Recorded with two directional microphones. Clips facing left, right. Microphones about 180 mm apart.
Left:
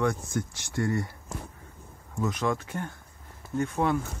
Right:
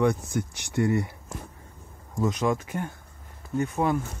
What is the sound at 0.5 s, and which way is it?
Speech, 15° right (ahead or behind).